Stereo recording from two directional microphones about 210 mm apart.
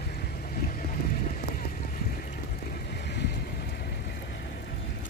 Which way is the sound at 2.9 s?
50° left (ahead or behind).